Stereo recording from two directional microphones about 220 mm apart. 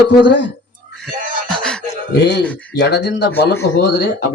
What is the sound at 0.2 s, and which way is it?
Speech, 55° left (ahead or behind).